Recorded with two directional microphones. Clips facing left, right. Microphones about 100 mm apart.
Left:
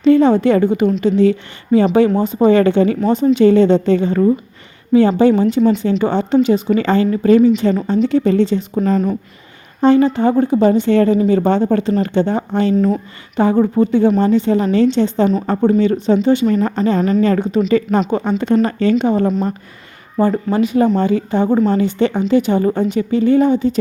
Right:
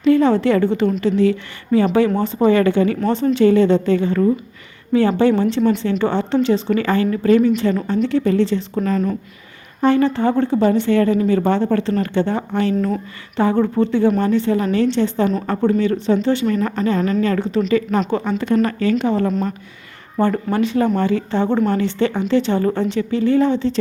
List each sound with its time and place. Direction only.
0.0 s speech: 20° left (ahead or behind)
9.8 s speech: 20° left (ahead or behind)
16.5 s a woman's voice: 35° left (ahead or behind); by 23.8 s 10° left (ahead or behind)